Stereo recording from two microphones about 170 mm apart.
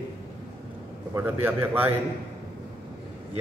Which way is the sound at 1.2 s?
10° right (ahead or behind).